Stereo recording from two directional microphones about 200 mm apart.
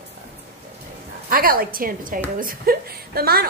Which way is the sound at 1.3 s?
45° right (ahead or behind).